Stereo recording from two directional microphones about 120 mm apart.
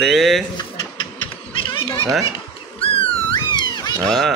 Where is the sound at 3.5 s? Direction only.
35° left (ahead or behind).